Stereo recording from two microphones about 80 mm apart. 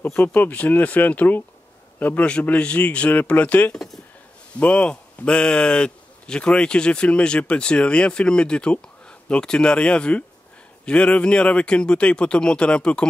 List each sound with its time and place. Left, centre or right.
0.0 s speech: left
3.7 s speech: centre
4.6 s speech: centre